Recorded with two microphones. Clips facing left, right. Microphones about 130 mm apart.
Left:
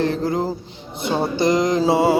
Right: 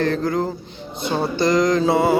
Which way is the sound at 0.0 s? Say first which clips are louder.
Even; 25° left (ahead or behind).